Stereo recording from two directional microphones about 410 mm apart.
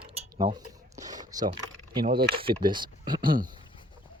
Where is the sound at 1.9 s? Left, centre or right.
Centre.